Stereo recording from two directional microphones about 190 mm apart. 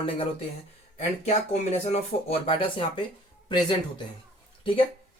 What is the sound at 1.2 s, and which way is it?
A man's voice, 35° left (ahead or behind).